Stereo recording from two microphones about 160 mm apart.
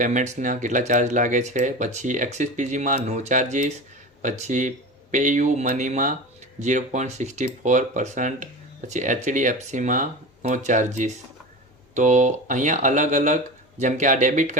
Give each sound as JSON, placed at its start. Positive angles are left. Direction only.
{"t": 0.0, "sound": "speech", "side_deg": -50}